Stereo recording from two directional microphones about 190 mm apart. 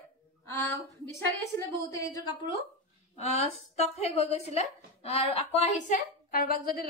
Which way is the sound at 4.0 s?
35° left (ahead or behind).